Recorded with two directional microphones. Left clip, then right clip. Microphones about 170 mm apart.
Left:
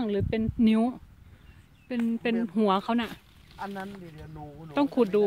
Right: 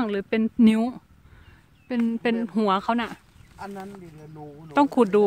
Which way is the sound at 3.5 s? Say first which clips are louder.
Even; 5° left (ahead or behind).